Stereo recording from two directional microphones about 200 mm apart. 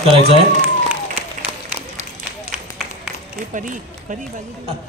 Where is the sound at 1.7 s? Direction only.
10° right (ahead or behind).